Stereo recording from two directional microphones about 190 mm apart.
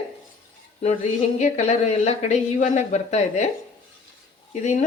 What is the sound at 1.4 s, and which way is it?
A woman's voice, 35° left (ahead or behind).